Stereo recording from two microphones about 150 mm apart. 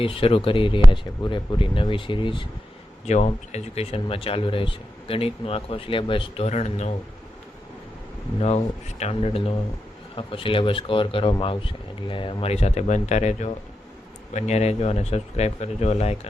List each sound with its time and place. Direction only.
0.0 s speech: 35° left (ahead or behind)
3.1 s speech: 50° left (ahead or behind)
8.4 s speech: 45° left (ahead or behind)